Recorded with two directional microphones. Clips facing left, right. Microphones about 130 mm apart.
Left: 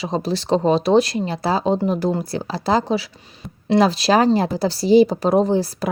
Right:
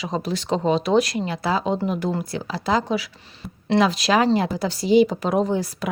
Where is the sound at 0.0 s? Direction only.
30° left (ahead or behind).